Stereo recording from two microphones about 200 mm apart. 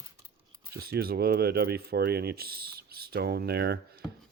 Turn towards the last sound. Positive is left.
turn(degrees=-55)  # may be behind; listen again after turning